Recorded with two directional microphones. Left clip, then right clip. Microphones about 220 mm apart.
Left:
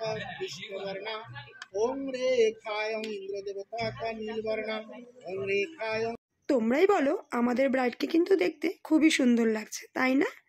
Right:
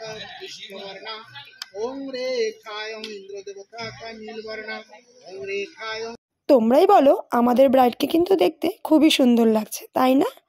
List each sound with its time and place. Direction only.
1.8 s speech: 15° left (ahead or behind)
6.7 s speech: 25° right (ahead or behind)